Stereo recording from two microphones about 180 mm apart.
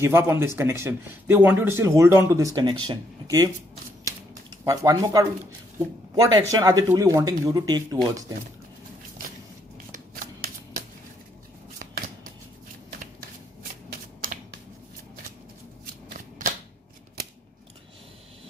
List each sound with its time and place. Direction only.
0.0 s speech: 15° right (ahead or behind)
4.5 s speech: 20° right (ahead or behind)
9.9 s shuffling cards: 50° right (ahead or behind)
14.2 s computer keyboard: 50° right (ahead or behind)
16.1 s shuffling cards: 45° right (ahead or behind)